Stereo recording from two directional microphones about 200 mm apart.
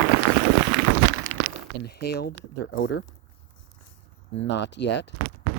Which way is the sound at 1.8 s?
50° left (ahead or behind).